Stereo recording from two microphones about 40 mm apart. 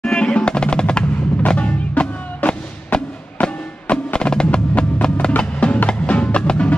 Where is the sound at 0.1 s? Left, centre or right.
Centre.